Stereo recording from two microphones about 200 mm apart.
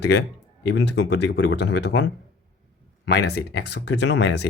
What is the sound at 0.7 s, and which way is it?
Speech, 65° left (ahead or behind).